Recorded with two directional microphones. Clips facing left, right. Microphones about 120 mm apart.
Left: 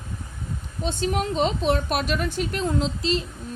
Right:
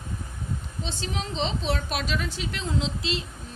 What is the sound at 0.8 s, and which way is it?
A woman's voice, 50° left (ahead or behind).